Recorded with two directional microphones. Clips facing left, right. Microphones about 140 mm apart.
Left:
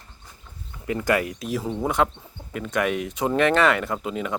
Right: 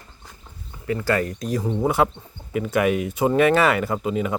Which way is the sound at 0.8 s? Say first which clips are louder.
Right 1 dB; 20° left (ahead or behind).